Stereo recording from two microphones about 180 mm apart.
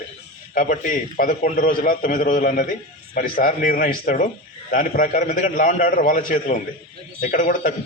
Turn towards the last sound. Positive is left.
turn(degrees=45)  # may be behind; listen again after turning